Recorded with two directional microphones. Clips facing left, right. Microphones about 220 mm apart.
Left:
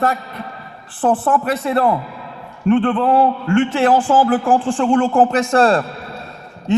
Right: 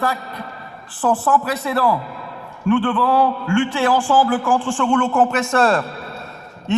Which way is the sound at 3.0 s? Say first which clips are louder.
Left 2 dB; 25° left (ahead or behind).